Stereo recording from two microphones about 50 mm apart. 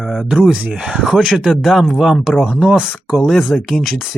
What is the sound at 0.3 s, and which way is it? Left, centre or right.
Speech, centre.